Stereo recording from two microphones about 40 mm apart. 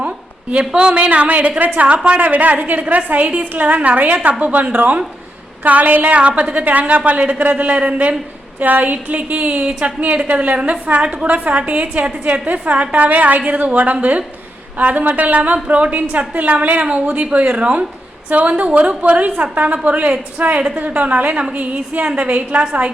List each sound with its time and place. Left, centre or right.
0.6 s speech: right
1.1 s a woman's voice: right
15.5 s a woman's voice: right